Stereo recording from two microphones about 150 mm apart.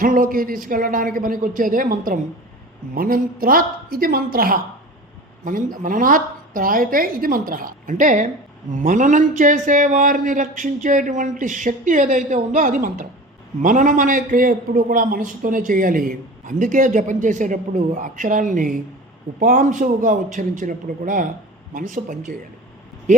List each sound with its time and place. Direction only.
0.0 s a woman's voice: 70° right (ahead or behind)
5.7 s a woman's voice: 65° right (ahead or behind)